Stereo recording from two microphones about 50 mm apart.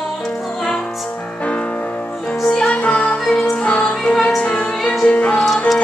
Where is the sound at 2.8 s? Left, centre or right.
Left.